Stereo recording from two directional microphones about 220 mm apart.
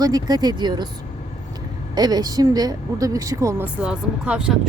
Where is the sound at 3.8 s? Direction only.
5° right (ahead or behind).